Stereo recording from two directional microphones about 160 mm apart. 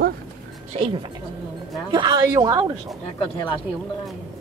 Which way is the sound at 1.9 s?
30° right (ahead or behind).